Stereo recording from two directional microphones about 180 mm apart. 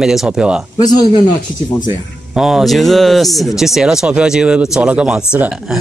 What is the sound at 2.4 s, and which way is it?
Speech, centre (ahead or behind).